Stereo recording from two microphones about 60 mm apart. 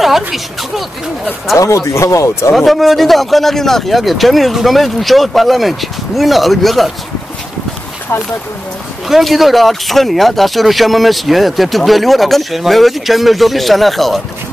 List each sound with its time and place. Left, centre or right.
0.0 s speech: centre
1.6 s speech: left
2.5 s speech: centre
9.1 s speech: centre